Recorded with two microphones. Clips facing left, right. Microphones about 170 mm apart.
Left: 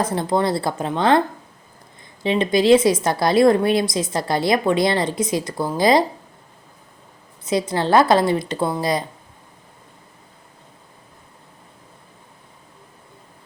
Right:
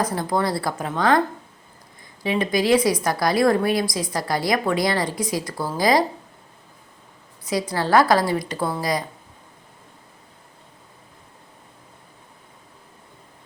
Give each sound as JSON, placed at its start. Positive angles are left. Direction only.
{"t": 0.0, "sound": "a woman's voice", "side_deg": 25}
{"t": 2.2, "sound": "a woman's voice", "side_deg": 25}
{"t": 7.4, "sound": "a woman's voice", "side_deg": 20}